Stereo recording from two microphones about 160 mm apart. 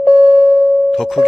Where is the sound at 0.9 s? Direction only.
Centre (ahead or behind).